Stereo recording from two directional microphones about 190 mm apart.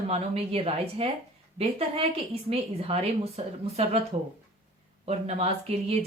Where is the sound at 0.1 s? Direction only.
30° right (ahead or behind).